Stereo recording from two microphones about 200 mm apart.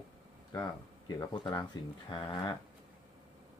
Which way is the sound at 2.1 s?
20° left (ahead or behind).